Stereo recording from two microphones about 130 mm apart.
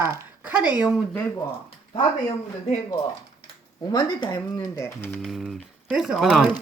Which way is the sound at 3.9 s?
30° left (ahead or behind).